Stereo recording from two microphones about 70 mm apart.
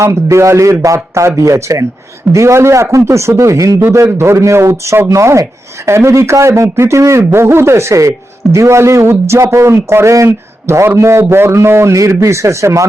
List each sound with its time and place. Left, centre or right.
0.0 s speech: right
3.9 s speech: right